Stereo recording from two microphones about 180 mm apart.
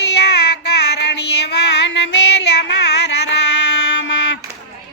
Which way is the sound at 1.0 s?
75° left (ahead or behind).